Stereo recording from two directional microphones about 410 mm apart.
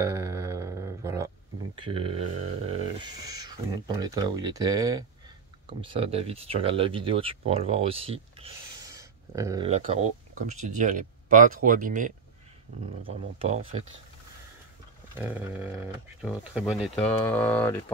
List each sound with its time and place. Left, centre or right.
0.0 s a sound: centre
1.8 s speech: centre
15.1 s speech: centre